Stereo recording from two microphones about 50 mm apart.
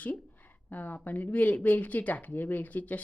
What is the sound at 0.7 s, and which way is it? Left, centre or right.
Speech, left.